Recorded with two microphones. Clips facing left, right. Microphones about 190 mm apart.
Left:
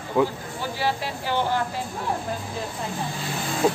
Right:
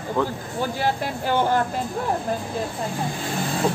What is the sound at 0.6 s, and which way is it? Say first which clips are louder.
Speech: right 3 dB; 50° right (ahead or behind).